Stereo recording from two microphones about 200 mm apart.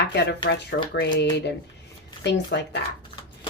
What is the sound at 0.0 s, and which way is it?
Speech, 60° left (ahead or behind).